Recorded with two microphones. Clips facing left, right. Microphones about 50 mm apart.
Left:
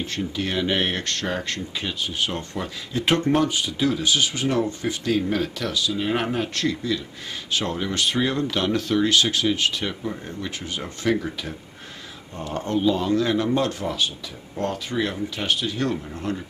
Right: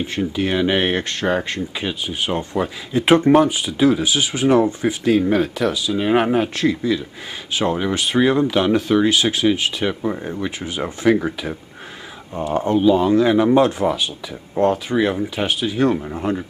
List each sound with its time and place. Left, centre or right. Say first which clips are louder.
0.0 s speech: right 6 dB; centre